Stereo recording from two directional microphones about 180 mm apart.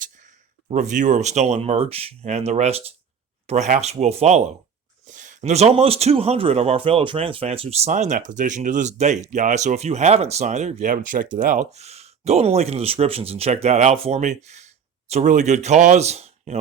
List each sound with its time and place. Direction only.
0.7 s speech: 40° right (ahead or behind)